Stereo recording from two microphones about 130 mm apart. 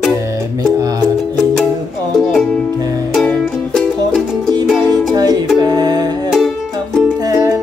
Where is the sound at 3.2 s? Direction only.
Centre (ahead or behind).